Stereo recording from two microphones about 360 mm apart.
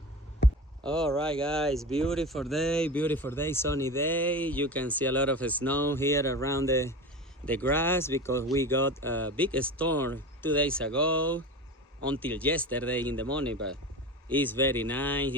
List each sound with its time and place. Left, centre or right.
0.9 s speech: centre